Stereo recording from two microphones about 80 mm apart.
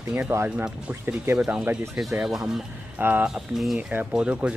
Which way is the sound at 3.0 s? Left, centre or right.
Right.